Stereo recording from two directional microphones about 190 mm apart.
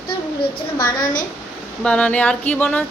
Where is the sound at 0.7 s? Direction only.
20° left (ahead or behind).